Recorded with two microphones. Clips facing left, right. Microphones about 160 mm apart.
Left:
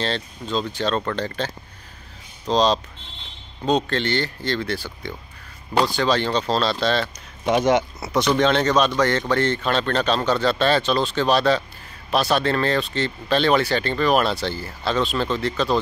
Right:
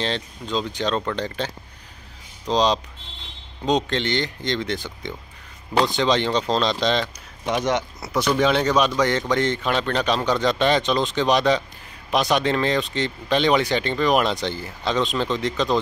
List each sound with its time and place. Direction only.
0.0 s speech: 15° right (ahead or behind)
2.5 s speech: 15° right (ahead or behind)
7.6 s speech: 5° left (ahead or behind); by 15.8 s 15° right (ahead or behind)